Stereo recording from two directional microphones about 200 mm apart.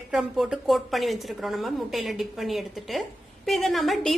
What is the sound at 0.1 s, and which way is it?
A woman's voice, 5° right (ahead or behind).